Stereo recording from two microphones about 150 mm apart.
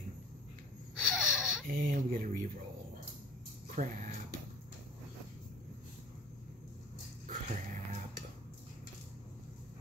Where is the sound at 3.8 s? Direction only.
60° right (ahead or behind).